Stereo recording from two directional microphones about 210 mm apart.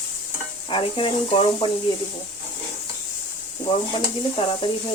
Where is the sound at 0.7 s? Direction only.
25° left (ahead or behind).